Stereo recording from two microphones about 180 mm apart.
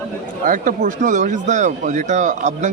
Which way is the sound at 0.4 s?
45° right (ahead or behind).